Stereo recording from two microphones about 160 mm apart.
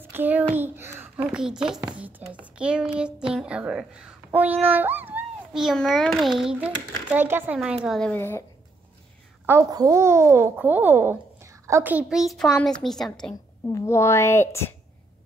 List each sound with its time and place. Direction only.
0.1 s a child's voice: 10° right (ahead or behind)
8.1 s a woman's voice: 15° left (ahead or behind)
9.5 s a child's voice: 20° right (ahead or behind); by 13.4 s 5° left (ahead or behind)
13.7 s a woman's voice: 15° left (ahead or behind)